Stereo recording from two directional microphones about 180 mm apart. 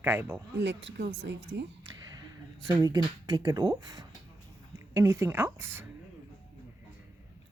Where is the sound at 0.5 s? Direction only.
75° right (ahead or behind).